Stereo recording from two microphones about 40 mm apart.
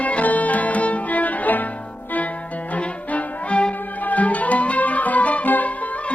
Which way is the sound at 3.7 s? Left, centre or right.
Left.